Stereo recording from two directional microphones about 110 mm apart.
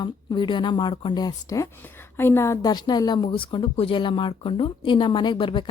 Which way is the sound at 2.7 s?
40° left (ahead or behind).